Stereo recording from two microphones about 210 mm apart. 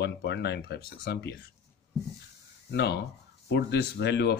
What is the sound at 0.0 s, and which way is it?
Speech, 55° left (ahead or behind).